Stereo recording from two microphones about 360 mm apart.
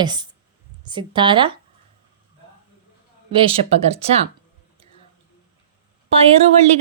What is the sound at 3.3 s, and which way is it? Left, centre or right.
Speech, centre.